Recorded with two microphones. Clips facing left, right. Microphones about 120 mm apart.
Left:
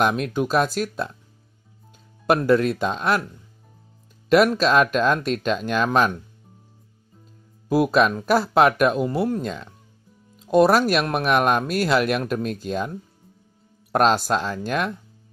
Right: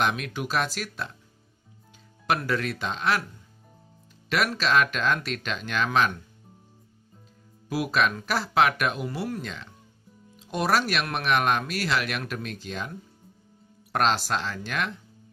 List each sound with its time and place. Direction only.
0.0 s speech: 40° left (ahead or behind)
2.2 s speech: 45° left (ahead or behind)
4.3 s speech: 45° left (ahead or behind)
7.7 s speech: 50° left (ahead or behind)
13.9 s speech: 50° left (ahead or behind)